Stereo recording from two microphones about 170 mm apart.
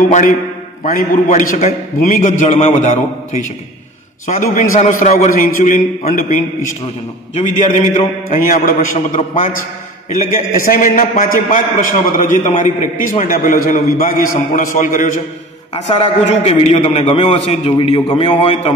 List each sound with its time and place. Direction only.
0.1 s a man's voice: 45° left (ahead or behind)
4.3 s a man's voice: 50° left (ahead or behind)
15.9 s a man's voice: 35° left (ahead or behind)